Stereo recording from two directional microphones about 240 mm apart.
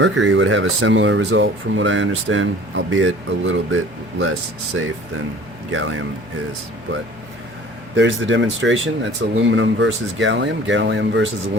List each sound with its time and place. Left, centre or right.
0.0 s speech: right
5.7 s speech: right
7.9 s speech: right